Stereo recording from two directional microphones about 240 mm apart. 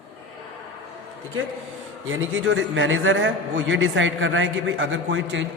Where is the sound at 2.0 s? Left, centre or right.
Right.